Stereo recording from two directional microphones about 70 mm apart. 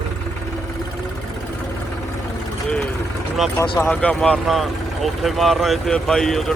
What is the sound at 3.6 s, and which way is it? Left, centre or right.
Speech, left.